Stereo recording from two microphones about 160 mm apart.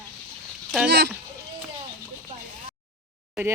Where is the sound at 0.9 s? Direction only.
90° right.